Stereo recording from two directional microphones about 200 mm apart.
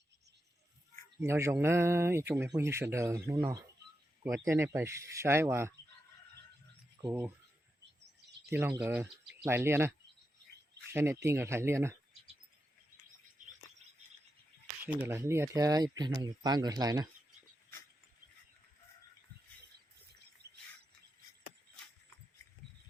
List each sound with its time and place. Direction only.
1.2 s speech: 15° right (ahead or behind)
7.0 s speech: 10° right (ahead or behind)
8.4 s speech: 10° right (ahead or behind)
10.9 s speech: 10° right (ahead or behind)
14.8 s speech: 10° right (ahead or behind)
20.4 s bird: 55° right (ahead or behind)